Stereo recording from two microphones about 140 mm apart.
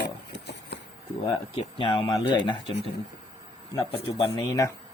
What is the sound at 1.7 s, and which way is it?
Speech, 40° left (ahead or behind).